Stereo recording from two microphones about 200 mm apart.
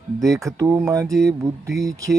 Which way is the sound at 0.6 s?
15° right (ahead or behind).